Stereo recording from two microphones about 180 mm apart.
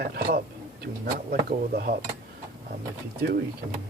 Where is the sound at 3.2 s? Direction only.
55° right (ahead or behind).